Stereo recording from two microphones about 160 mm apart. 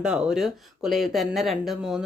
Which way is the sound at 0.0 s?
5° right (ahead or behind).